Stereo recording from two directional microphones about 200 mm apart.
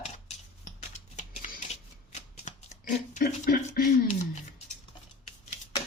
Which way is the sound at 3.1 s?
45° left (ahead or behind).